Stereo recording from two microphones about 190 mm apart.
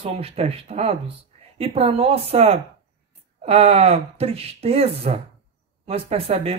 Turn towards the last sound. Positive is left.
turn(degrees=-30)  # may be behind; listen again after turning